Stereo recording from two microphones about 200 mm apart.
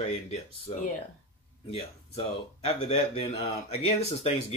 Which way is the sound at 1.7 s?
30° left (ahead or behind).